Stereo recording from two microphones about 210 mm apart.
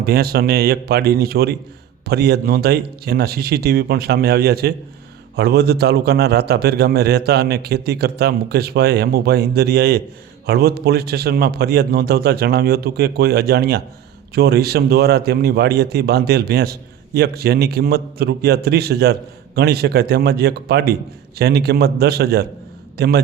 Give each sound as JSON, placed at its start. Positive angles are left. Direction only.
{"t": 0.0, "sound": "a man's voice", "side_deg": -45}